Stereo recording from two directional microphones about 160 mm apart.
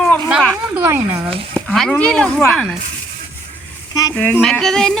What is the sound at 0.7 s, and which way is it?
Speech, 15° right (ahead or behind).